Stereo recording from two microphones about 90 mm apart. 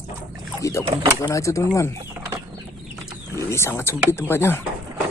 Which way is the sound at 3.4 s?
30° left (ahead or behind).